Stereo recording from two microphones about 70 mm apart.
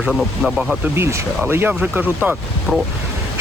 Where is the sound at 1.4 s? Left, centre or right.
Right.